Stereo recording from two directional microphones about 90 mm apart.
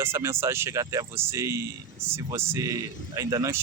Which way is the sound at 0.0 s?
30° right (ahead or behind).